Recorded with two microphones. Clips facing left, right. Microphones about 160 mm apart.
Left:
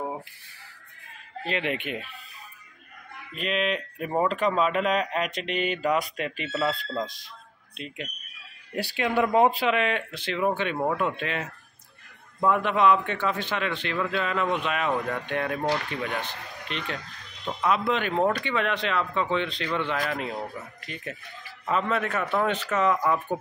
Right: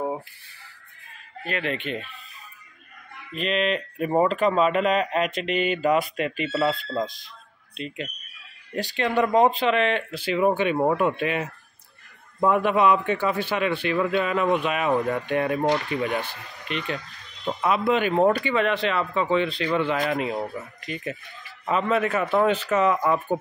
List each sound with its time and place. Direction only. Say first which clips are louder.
1.4 s speech: right 1 dB; 20° left (ahead or behind)
3.3 s speech: right 3 dB; centre (ahead or behind)
10.1 s a man's voice: right 5 dB; 10° right (ahead or behind)